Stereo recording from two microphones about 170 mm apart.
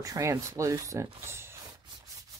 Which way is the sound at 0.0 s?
20° right (ahead or behind).